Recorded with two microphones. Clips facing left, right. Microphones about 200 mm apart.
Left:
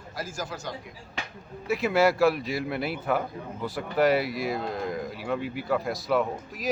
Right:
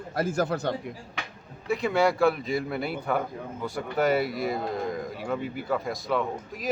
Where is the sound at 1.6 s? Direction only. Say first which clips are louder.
Left 1 dB; 5° left (ahead or behind).